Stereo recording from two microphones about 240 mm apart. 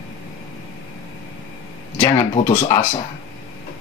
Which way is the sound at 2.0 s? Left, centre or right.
Centre.